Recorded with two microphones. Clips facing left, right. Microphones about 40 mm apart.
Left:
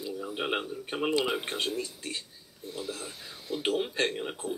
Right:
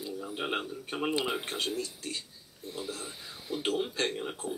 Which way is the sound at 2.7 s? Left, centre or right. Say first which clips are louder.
Left 1 dB; centre.